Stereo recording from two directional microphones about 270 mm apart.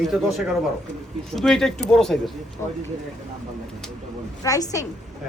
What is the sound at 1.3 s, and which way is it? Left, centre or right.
Speech, centre.